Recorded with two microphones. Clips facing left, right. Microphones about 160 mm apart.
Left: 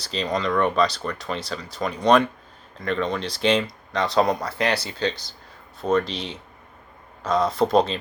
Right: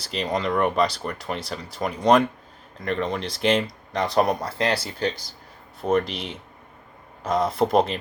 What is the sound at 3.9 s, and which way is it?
Speech, 65° left (ahead or behind).